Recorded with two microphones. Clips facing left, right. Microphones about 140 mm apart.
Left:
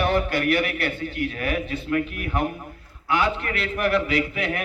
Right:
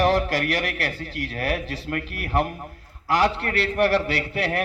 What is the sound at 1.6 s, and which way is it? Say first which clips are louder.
Speech: left 5 dB; 90° right.